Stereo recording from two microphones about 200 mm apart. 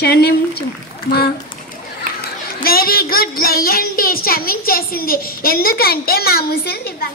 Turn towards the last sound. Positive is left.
turn(degrees=50)  # may be behind; listen again after turning